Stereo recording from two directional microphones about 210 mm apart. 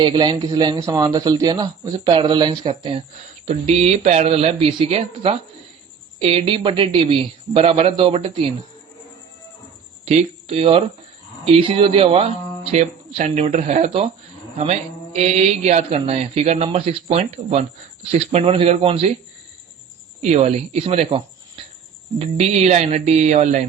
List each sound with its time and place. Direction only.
0.0 s speech: 20° right (ahead or behind)
10.1 s speech: 30° right (ahead or behind)
20.2 s speech: 30° right (ahead or behind)